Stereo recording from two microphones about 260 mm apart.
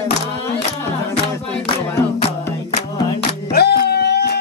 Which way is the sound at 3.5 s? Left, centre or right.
Left.